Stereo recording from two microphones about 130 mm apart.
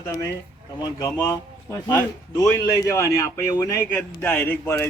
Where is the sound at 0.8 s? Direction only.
25° left (ahead or behind).